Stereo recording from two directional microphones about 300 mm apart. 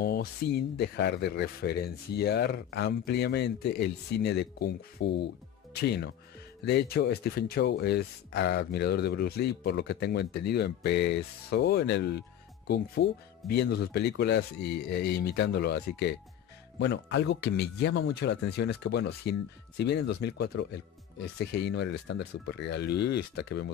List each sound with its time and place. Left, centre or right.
0.0 s speech: left